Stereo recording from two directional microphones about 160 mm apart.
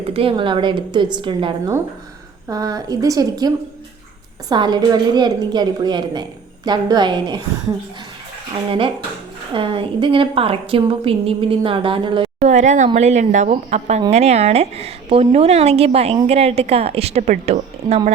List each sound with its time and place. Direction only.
0.1 s a woman's voice: 35° right (ahead or behind)
9.5 s a woman's voice: 35° right (ahead or behind)
12.4 s a woman's voice: 45° right (ahead or behind)